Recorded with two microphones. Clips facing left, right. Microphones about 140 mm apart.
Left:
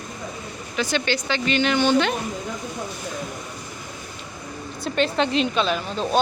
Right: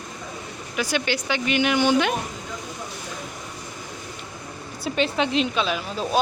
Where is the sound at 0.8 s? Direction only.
10° right (ahead or behind).